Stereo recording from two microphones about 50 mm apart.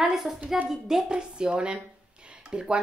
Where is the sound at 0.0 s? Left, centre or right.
Centre.